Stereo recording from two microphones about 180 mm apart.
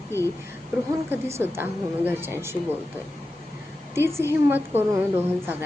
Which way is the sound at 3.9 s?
15° right (ahead or behind).